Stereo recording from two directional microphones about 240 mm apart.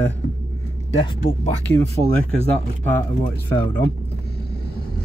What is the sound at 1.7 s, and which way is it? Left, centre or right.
Speech, centre.